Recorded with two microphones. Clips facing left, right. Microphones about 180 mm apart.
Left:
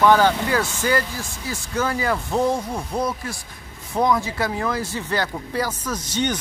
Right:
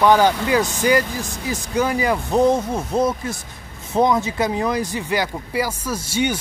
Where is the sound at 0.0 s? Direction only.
15° right (ahead or behind).